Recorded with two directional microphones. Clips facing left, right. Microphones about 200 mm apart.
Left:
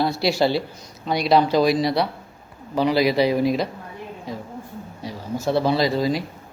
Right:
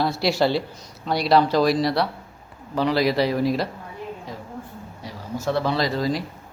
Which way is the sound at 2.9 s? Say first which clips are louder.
Left 2 dB; centre (ahead or behind).